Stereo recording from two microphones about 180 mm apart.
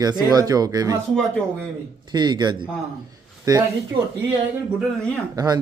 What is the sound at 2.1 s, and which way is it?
Speech, 25° right (ahead or behind).